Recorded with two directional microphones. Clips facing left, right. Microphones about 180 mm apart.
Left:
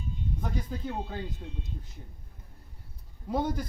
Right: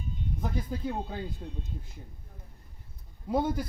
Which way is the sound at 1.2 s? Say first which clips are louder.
Right 1 dB; 45° right (ahead or behind).